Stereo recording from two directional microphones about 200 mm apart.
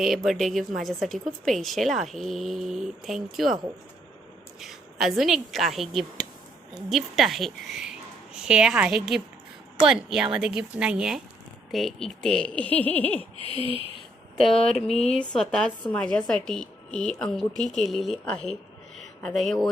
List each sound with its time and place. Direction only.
0.0 s a woman's voice: centre (ahead or behind)
4.6 s a woman's voice: centre (ahead or behind)
13.4 s a sound: 30° left (ahead or behind)
14.4 s a woman's voice: centre (ahead or behind)